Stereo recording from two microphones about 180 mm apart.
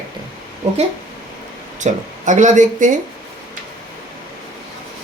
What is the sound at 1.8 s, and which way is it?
Speech, 45° right (ahead or behind).